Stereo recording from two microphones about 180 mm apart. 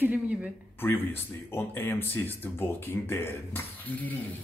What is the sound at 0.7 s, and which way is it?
Speech, 10° left (ahead or behind).